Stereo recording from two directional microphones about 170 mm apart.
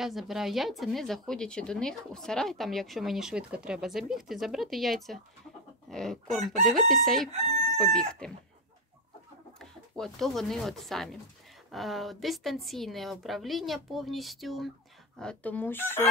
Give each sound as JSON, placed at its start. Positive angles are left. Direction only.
{"t": 0.0, "sound": "speech", "side_deg": 0}
{"t": 9.6, "sound": "speech", "side_deg": 0}